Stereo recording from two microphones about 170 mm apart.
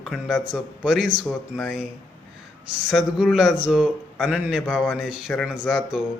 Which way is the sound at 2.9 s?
Centre (ahead or behind).